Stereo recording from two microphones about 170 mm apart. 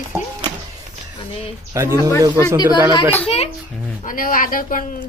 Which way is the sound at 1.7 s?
15° right (ahead or behind).